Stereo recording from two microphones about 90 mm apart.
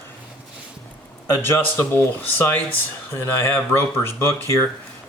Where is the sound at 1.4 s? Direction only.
25° left (ahead or behind).